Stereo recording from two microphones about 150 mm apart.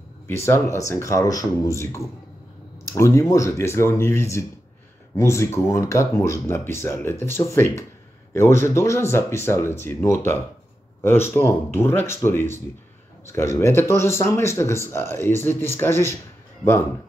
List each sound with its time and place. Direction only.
0.3 s speech: 15° left (ahead or behind)